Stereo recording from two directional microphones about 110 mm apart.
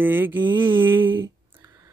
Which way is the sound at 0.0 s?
20° right (ahead or behind).